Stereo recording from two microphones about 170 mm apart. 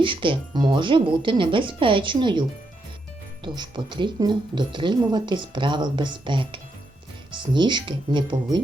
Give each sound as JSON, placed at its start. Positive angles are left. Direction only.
{"t": 0.0, "sound": "speech", "side_deg": -30}
{"t": 3.4, "sound": "speech", "side_deg": -25}